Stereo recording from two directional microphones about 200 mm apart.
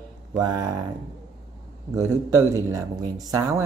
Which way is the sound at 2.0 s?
15° right (ahead or behind).